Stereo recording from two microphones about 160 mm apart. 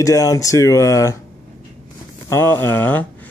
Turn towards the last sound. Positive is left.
turn(degrees=10)  # may be behind; listen again after turning